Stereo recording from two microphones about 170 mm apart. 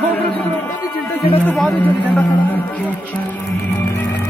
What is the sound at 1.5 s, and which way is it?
Speech, 5° left (ahead or behind).